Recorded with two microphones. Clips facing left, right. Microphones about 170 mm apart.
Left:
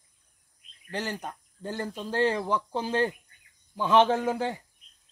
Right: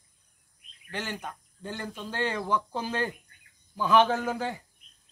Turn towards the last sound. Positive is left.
turn(degrees=25)  # may be behind; listen again after turning